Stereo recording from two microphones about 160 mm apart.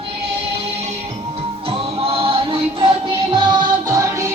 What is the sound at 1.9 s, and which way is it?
Music, 35° right (ahead or behind).